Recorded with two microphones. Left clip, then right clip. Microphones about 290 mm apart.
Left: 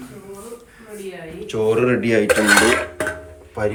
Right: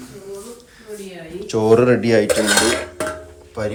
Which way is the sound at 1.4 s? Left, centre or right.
Right.